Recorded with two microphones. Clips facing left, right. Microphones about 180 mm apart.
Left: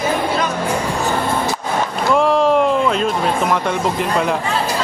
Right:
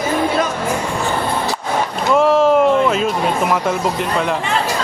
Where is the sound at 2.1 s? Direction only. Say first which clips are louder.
Right 2 dB; centre (ahead or behind).